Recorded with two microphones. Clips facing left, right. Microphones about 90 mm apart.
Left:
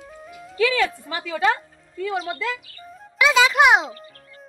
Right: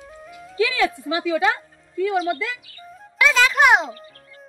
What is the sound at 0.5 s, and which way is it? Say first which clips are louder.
Speech: even; 10° right (ahead or behind).